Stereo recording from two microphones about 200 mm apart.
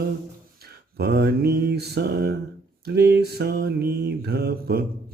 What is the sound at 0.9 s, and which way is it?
Mantra, 55° right (ahead or behind).